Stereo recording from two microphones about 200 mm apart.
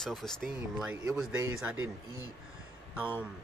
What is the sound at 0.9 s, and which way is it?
Speech, 10° right (ahead or behind).